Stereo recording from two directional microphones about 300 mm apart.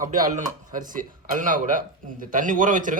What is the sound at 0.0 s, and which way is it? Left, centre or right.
A man's voice, right.